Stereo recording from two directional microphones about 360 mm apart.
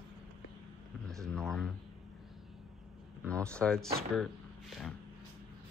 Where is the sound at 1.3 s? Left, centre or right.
Centre.